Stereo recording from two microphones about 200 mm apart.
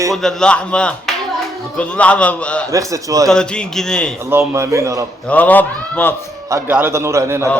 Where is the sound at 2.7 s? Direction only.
15° right (ahead or behind).